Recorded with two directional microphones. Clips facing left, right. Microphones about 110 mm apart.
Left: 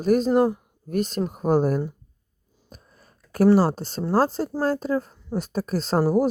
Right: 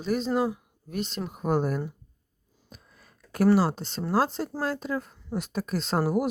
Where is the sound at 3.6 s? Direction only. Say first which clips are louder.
Left 4 dB; 40° left (ahead or behind).